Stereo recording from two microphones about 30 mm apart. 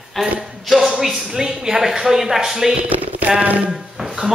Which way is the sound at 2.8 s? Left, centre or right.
Right.